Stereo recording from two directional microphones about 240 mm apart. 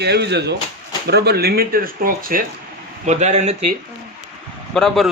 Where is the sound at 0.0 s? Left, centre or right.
Right.